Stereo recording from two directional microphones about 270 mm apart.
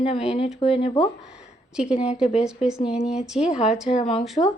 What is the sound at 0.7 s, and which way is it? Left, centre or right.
Speech, centre.